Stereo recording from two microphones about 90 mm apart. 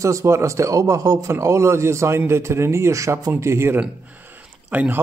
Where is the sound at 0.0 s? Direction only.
35° right (ahead or behind).